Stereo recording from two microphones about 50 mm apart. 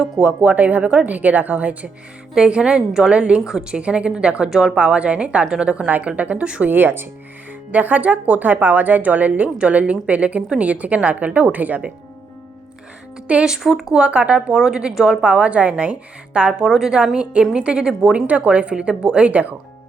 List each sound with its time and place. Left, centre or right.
0.0 s a woman's voice: centre
0.4 s a woman's voice: right
2.3 s a woman's voice: centre
3.4 s a woman's voice: centre
3.8 s a woman's voice: right
6.7 s speech: right
7.7 s a woman's voice: right
13.2 s speech: right
13.6 s a woman's voice: centre
14.0 s a woman's voice: right
16.6 s a woman's voice: centre
18.3 s a woman's voice: right